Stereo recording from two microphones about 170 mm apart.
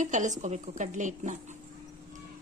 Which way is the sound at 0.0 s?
45° right (ahead or behind).